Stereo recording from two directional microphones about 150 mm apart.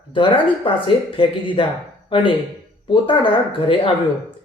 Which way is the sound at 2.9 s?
35° left (ahead or behind).